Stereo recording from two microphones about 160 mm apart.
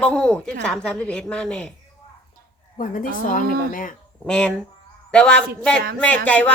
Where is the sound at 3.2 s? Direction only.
60° left (ahead or behind).